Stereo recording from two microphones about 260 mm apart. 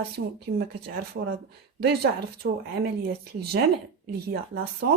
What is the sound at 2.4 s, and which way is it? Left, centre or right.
Speech, right.